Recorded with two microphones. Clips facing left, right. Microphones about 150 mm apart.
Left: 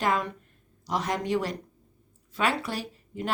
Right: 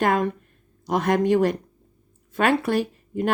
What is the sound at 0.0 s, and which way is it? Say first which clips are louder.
Speech: right 6 dB; 55° right (ahead or behind).